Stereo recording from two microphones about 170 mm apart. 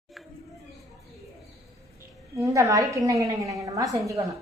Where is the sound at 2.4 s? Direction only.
20° right (ahead or behind).